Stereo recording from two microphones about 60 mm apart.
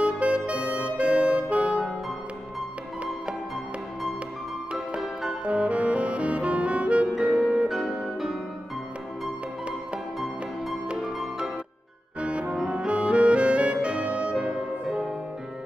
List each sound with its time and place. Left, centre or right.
0.0 s music: right
4.9 s music: centre
5.4 s music: right
7.7 s music: centre
10.9 s music: centre
12.2 s music: right